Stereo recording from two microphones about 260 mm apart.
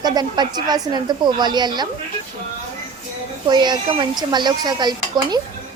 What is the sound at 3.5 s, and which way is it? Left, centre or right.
A woman's voice, centre.